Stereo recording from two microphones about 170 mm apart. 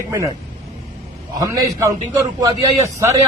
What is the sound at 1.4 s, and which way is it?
Speech, 20° right (ahead or behind).